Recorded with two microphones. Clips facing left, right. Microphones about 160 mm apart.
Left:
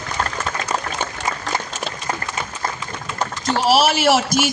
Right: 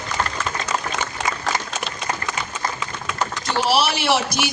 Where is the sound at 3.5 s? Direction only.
45° left (ahead or behind).